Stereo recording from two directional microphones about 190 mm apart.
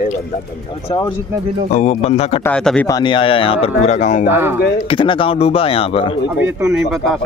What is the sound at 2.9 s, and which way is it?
Speech, 25° left (ahead or behind).